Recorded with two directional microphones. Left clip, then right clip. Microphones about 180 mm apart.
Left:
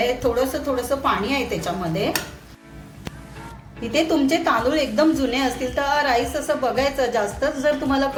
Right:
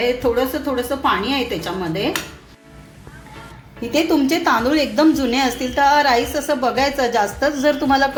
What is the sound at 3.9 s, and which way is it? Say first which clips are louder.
A woman's voice: right 2 dB; 30° right (ahead or behind).